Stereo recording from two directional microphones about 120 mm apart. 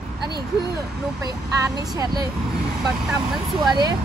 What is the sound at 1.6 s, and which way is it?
Speech, 30° right (ahead or behind).